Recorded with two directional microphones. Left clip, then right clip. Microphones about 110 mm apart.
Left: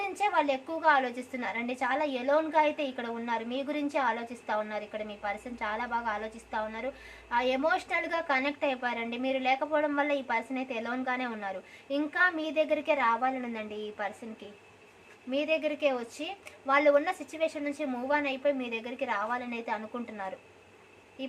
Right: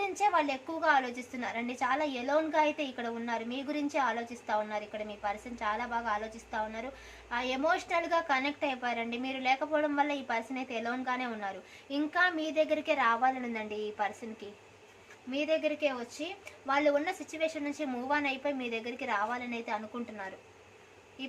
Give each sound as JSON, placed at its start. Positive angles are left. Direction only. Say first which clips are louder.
{"t": 0.0, "sound": "a woman's voice", "louder": "left 1 dB", "side_deg": 30}
{"t": 15.3, "sound": "a woman's voice", "louder": "left 1 dB", "side_deg": 35}
{"t": 17.3, "sound": "a woman's voice", "louder": "left 1 dB", "side_deg": 25}